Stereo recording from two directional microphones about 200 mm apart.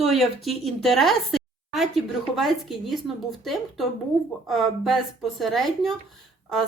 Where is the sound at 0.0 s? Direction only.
Centre (ahead or behind).